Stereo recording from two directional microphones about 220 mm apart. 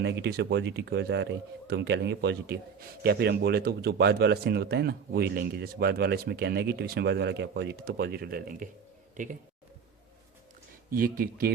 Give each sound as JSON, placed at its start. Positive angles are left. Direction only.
{"t": 0.0, "sound": "speech", "side_deg": -50}
{"t": 10.9, "sound": "speech", "side_deg": -40}